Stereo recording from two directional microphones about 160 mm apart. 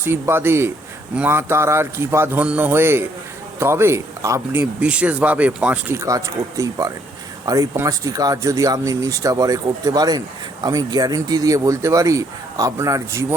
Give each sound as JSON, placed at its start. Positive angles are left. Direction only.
{"t": 0.0, "sound": "speech", "side_deg": -15}